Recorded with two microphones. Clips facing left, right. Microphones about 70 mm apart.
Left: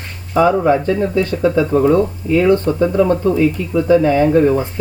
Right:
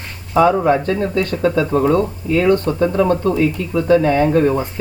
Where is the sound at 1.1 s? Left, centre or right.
Left.